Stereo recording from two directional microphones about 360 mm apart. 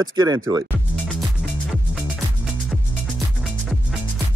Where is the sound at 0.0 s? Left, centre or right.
Centre.